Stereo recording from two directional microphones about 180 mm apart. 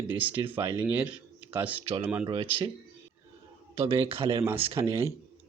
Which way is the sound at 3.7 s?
30° right (ahead or behind).